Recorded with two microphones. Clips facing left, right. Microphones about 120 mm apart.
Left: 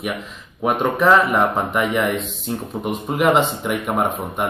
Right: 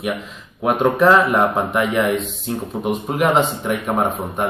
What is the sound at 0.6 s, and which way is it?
Speech, centre (ahead or behind).